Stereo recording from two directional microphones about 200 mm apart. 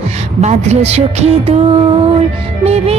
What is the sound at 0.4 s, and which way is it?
Speech, 35° right (ahead or behind).